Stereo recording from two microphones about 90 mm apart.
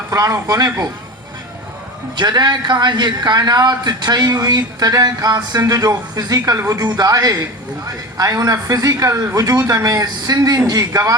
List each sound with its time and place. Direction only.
0.1 s a man's voice: 40° right (ahead or behind)
2.1 s a man's voice: 50° right (ahead or behind)